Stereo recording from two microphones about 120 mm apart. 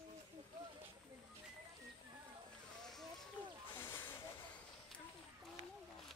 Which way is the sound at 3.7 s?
15° left (ahead or behind).